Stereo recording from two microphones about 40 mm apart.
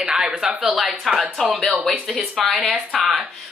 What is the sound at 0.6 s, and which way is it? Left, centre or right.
Speech, centre.